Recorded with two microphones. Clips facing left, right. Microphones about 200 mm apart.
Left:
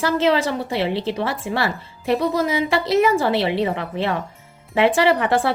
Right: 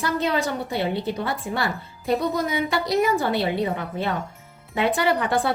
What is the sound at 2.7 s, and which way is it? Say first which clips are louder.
Speech: left 4 dB; 25° left (ahead or behind).